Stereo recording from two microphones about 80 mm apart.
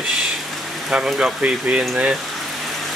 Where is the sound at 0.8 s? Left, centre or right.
Centre.